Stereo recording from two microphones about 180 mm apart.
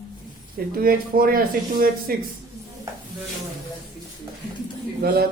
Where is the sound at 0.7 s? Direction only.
55° right (ahead or behind).